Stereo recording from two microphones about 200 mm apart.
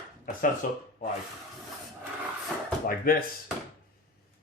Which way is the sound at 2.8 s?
45° left (ahead or behind).